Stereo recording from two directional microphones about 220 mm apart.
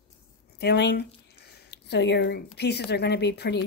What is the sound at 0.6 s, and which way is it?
Speech, 50° left (ahead or behind).